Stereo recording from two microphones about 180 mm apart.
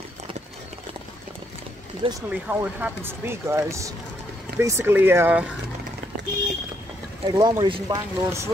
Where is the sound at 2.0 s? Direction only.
30° right (ahead or behind).